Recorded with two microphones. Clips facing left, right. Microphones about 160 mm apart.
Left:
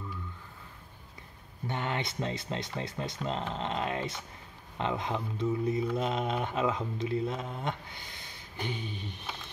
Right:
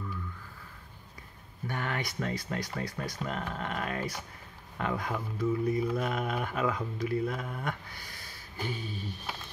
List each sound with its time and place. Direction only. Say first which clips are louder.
1.7 s speech: left 1 dB; 25° left (ahead or behind)